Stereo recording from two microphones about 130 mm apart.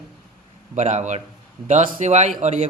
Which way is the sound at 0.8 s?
65° right (ahead or behind).